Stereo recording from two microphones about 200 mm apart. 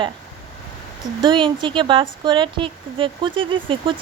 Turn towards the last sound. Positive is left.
turn(degrees=-25)  # may be behind; listen again after turning